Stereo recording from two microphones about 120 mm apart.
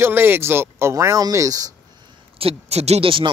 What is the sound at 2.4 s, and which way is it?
Speech, 60° right (ahead or behind).